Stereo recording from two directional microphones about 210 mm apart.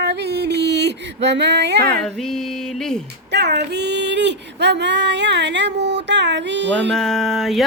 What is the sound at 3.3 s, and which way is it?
Speech, 55° right (ahead or behind).